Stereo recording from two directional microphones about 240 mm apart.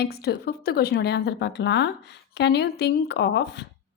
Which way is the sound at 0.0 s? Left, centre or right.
Left.